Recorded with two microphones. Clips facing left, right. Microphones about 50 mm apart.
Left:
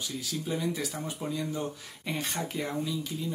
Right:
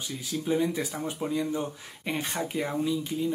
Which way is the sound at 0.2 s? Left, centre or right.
Right.